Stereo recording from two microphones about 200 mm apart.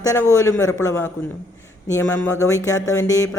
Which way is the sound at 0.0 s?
15° left (ahead or behind).